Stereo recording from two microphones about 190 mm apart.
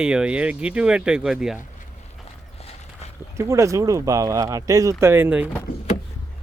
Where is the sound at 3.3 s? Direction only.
15° right (ahead or behind).